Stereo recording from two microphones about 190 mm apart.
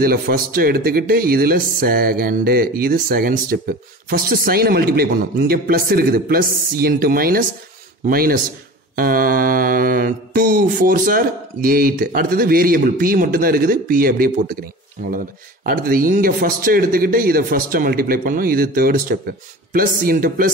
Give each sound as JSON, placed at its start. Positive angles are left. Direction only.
{"t": 0.0, "sound": "mantra", "side_deg": -50}
{"t": 15.6, "sound": "mantra", "side_deg": -50}